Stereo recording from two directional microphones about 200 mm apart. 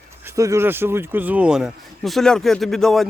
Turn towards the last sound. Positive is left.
turn(degrees=0)  # may be behind; listen again after turning